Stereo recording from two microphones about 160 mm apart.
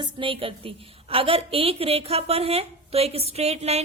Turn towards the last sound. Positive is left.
turn(degrees=-40)  # may be behind; listen again after turning